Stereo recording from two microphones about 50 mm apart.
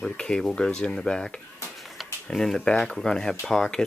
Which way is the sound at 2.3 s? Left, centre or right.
Centre.